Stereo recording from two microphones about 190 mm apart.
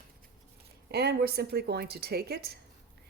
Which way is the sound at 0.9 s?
60° right (ahead or behind).